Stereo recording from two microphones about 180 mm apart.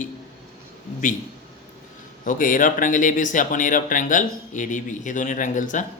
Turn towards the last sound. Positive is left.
turn(degrees=45)  # may be behind; listen again after turning